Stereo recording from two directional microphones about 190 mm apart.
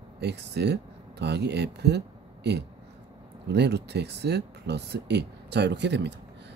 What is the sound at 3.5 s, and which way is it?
A man's voice, 60° right (ahead or behind).